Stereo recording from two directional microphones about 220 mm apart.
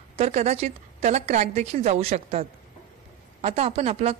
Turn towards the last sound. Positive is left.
turn(degrees=-30)  # may be behind; listen again after turning